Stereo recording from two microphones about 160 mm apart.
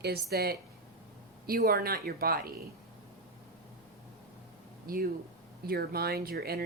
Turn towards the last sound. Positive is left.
turn(degrees=-75)  # may be behind; listen again after turning